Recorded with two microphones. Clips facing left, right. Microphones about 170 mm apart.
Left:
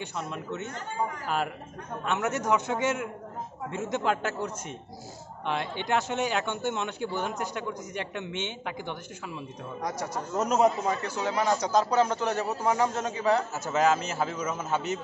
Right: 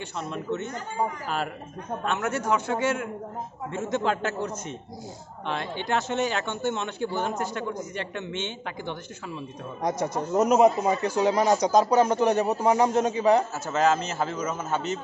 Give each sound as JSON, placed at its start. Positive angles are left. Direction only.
{"t": 0.2, "sound": "a man's voice", "side_deg": 10}
{"t": 2.0, "sound": "a man's voice", "side_deg": 20}
{"t": 9.8, "sound": "speech", "side_deg": -20}
{"t": 13.7, "sound": "a man's voice", "side_deg": 15}